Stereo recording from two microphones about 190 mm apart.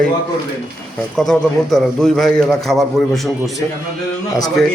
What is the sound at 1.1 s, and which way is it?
A man's voice, 5° left (ahead or behind).